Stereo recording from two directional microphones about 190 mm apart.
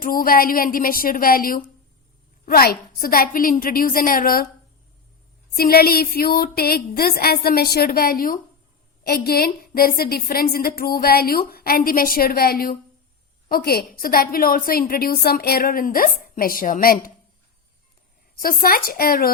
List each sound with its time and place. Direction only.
0.0 s a woman's voice: 50° left (ahead or behind)
5.5 s a woman's voice: 55° left (ahead or behind)
18.3 s a woman's voice: 50° left (ahead or behind)